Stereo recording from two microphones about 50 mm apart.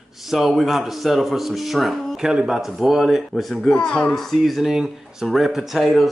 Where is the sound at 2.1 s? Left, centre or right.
Centre.